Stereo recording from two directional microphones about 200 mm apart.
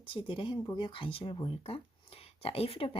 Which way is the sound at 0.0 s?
25° left (ahead or behind).